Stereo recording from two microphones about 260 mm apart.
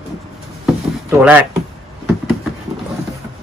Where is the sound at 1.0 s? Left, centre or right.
Centre.